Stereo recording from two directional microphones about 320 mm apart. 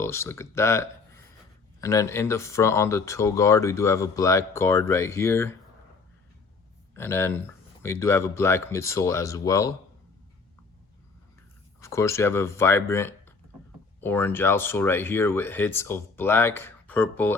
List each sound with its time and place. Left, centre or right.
0.0 s speech: centre
6.9 s speech: centre
11.8 s speech: centre